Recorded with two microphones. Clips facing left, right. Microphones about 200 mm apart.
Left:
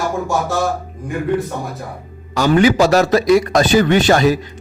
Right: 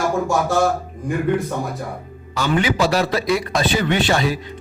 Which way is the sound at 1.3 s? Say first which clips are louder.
Left 2 dB; centre (ahead or behind).